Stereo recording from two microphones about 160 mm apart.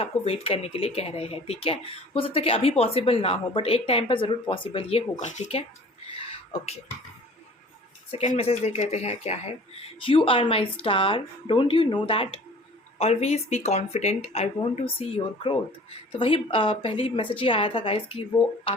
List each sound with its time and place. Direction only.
0.0 s speech: 35° left (ahead or behind)
6.1 s a sound: 35° left (ahead or behind)
8.4 s speech: 40° left (ahead or behind)